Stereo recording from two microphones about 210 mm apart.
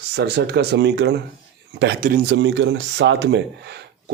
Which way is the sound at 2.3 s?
60° right (ahead or behind).